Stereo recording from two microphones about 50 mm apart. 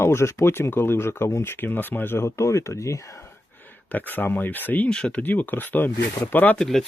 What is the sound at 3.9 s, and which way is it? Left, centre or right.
Speech, left.